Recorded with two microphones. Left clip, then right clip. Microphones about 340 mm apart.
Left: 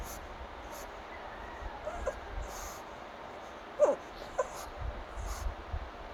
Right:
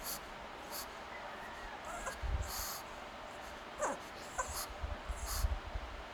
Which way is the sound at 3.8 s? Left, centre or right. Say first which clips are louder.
Left 12 dB; right.